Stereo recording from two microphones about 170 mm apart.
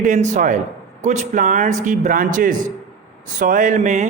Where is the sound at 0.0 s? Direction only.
50° right (ahead or behind).